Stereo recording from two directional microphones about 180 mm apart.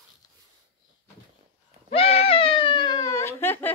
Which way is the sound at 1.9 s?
35° left (ahead or behind).